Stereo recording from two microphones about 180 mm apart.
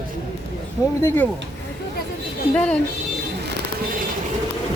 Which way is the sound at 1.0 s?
15° left (ahead or behind).